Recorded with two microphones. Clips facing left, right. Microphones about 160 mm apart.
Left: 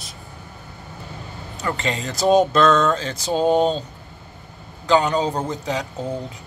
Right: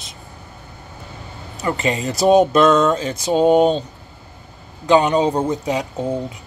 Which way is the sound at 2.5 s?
20° right (ahead or behind).